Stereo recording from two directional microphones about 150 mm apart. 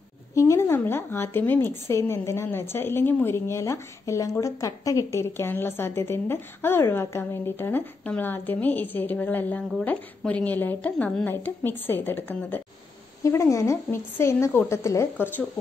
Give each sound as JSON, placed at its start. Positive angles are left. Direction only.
{"t": 0.3, "sound": "a woman's voice", "side_deg": 20}